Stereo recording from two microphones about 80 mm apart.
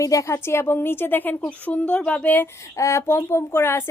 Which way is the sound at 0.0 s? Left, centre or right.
Left.